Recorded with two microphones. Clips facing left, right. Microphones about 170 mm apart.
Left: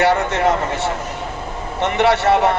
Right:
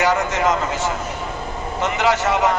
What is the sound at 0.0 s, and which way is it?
A man's voice, 60° left (ahead or behind).